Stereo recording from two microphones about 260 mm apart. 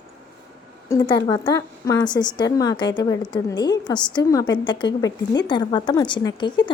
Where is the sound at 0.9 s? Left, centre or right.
Centre.